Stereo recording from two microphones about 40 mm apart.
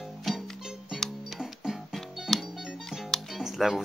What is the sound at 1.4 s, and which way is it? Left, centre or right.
Music, centre.